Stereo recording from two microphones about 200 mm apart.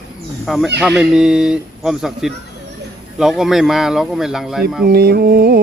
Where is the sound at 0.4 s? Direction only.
Centre (ahead or behind).